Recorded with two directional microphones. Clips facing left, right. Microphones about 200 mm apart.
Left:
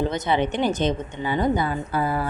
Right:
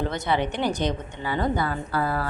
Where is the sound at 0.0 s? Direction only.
20° left (ahead or behind).